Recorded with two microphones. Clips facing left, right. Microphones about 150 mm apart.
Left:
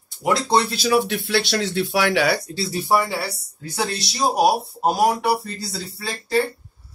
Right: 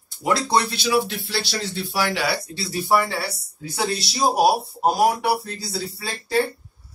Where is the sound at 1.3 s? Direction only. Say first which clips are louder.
Left 6 dB; 65° left (ahead or behind).